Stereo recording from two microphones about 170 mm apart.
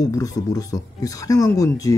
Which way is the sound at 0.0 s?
20° left (ahead or behind).